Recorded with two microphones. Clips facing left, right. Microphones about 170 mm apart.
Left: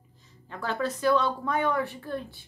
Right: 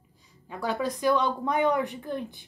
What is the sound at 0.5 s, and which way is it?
A woman's voice, 15° right (ahead or behind).